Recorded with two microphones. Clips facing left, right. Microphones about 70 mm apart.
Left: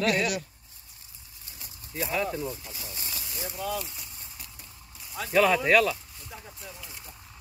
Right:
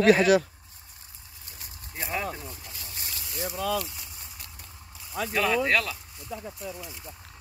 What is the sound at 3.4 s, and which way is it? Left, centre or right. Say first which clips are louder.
Speech: right 4 dB; right.